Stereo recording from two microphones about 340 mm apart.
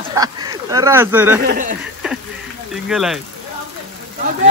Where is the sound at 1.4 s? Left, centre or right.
Right.